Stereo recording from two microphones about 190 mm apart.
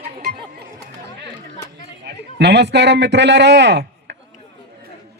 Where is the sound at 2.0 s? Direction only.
65° right (ahead or behind).